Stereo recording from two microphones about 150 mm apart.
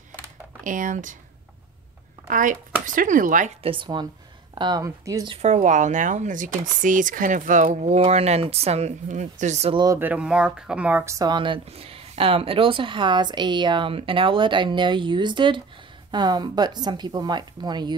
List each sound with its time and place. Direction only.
0.7 s speech: 60° right (ahead or behind)
2.2 s speech: 65° right (ahead or behind)
3.6 s speech: 35° right (ahead or behind)
5.4 s speech: 50° right (ahead or behind)
9.9 s speech: 10° right (ahead or behind); by 17.9 s 30° right (ahead or behind)